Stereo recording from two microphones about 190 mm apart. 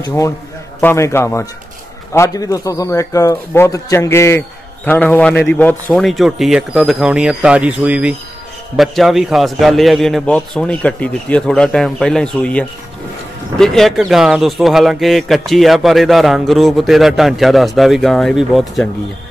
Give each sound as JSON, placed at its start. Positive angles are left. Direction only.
{"t": 0.0, "sound": "a man's voice", "side_deg": 15}